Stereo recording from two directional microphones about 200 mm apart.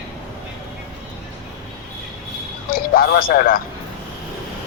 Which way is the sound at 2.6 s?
50° left (ahead or behind).